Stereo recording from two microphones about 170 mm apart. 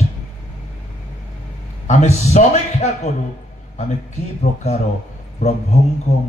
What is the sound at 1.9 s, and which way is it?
Speech, 40° left (ahead or behind).